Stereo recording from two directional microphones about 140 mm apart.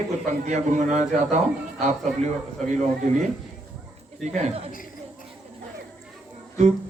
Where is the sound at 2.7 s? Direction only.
60° right (ahead or behind).